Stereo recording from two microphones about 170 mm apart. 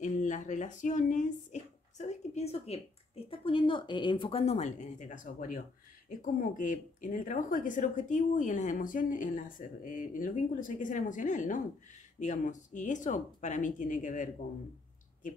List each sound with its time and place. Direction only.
0.0 s speech: 45° left (ahead or behind)